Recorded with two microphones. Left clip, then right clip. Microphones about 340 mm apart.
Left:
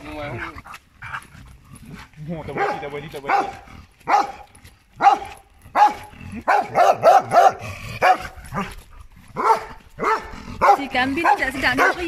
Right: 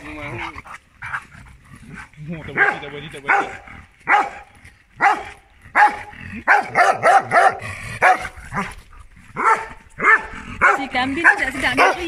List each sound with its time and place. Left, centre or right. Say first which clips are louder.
0.4 s dog: right 2 dB; centre
2.8 s speech: left 2 dB; left
4.0 s dog: right 2 dB; centre
10.8 s dog: even; centre
11.1 s speech: right 5 dB; centre